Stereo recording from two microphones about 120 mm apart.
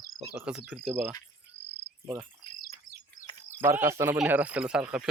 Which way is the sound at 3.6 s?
20° right (ahead or behind).